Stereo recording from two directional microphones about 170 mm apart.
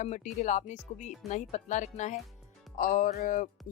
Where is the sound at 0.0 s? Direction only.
45° left (ahead or behind).